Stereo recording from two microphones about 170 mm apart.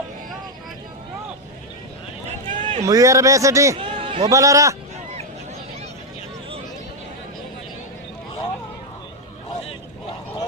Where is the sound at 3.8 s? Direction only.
30° right (ahead or behind).